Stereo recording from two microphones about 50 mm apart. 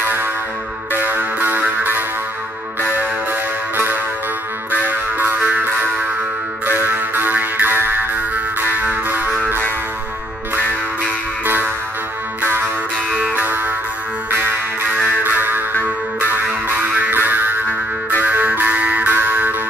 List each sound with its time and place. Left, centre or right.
0.0 s music: right
3.7 s music: right
11.4 s music: right
13.1 s music: right
14.3 s music: right